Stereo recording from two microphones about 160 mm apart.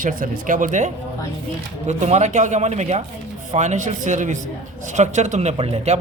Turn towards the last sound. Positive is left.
turn(degrees=-40)  # may be behind; listen again after turning